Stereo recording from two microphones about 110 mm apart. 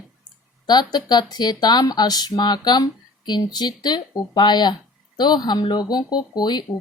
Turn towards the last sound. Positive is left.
turn(degrees=40)  # may be behind; listen again after turning